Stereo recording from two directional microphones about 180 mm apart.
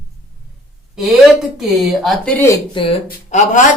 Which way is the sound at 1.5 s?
Centre (ahead or behind).